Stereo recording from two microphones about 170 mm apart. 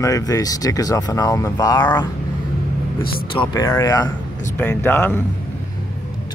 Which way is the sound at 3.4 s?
20° left (ahead or behind).